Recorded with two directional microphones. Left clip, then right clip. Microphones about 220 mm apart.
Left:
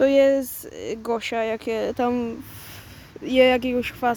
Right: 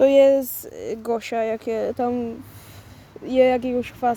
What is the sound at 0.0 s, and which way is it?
Speech, 5° right (ahead or behind).